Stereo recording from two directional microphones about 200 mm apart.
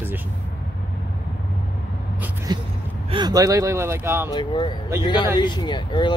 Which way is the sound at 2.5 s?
20° right (ahead or behind).